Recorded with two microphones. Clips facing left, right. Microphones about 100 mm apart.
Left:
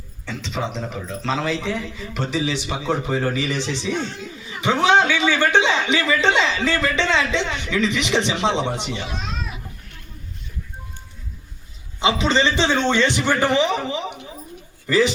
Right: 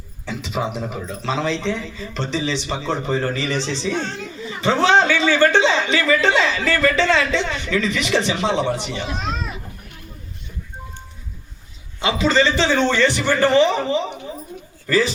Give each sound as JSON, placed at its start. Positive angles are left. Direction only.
{"t": 0.3, "sound": "speech", "side_deg": -5}
{"t": 1.5, "sound": "a man's voice", "side_deg": 10}
{"t": 11.9, "sound": "a man's voice", "side_deg": 20}